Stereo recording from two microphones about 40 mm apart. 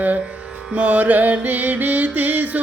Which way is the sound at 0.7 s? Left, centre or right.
Right.